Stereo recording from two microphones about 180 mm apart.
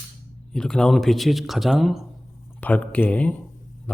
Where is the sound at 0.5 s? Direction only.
5° left (ahead or behind).